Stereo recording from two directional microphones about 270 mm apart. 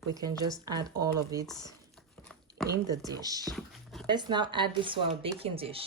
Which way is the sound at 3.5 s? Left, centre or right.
Centre.